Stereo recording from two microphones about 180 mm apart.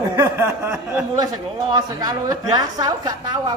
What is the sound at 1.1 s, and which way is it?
A woman's voice, 20° right (ahead or behind).